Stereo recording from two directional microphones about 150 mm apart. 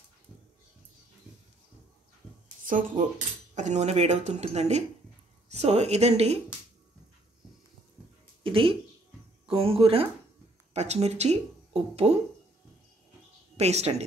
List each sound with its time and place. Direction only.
2.6 s speech: 60° right (ahead or behind)
3.5 s speech: 50° right (ahead or behind)
8.5 s speech: 35° right (ahead or behind)
13.6 s speech: 45° right (ahead or behind)